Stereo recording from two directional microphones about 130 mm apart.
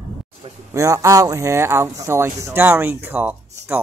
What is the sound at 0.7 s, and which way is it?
A man's voice, 25° right (ahead or behind).